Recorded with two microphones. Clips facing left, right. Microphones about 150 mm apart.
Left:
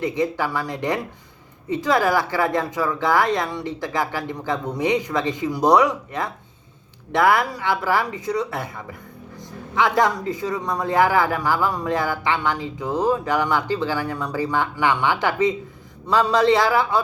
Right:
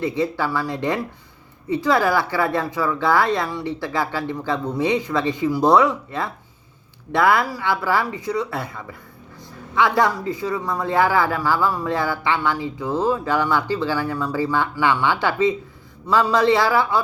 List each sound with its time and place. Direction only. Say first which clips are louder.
0.0 s speech: even; 15° left (ahead or behind)